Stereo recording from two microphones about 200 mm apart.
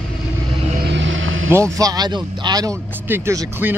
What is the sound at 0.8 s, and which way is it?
Vehicle, 65° right (ahead or behind).